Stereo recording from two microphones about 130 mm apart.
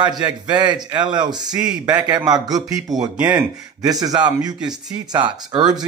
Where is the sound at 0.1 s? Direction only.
35° right (ahead or behind).